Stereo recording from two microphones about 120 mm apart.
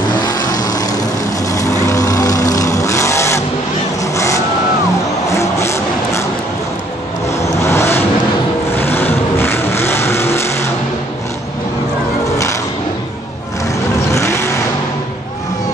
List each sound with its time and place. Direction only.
0.1 s vehicle: 30° left (ahead or behind)
5.3 s vehicle: 25° left (ahead or behind)
7.6 s vehicle: 20° left (ahead or behind)
14.1 s vehicle: 20° left (ahead or behind)